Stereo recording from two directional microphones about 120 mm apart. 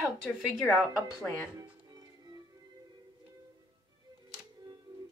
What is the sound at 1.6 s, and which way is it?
Music, 35° right (ahead or behind).